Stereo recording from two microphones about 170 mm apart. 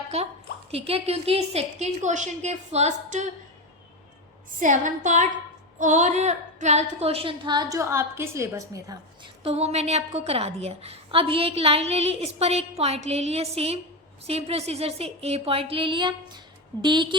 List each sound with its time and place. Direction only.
0.1 s a woman's voice: 40° right (ahead or behind)
4.6 s a woman's voice: 50° right (ahead or behind); by 9.3 s 20° right (ahead or behind)
9.4 s a woman's voice: 35° right (ahead or behind)